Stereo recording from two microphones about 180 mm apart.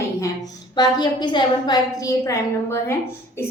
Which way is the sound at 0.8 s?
25° left (ahead or behind).